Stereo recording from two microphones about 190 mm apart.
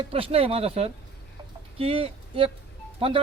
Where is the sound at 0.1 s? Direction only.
30° right (ahead or behind).